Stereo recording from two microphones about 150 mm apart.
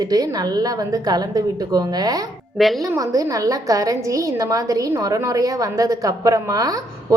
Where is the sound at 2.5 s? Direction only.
Centre (ahead or behind).